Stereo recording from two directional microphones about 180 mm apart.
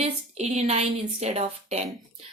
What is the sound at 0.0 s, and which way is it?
A woman's voice, 40° right (ahead or behind).